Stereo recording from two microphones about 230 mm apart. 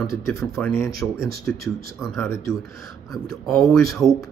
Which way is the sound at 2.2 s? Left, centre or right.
Centre.